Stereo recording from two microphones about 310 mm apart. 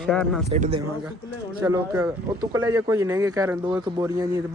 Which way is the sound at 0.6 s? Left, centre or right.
Centre.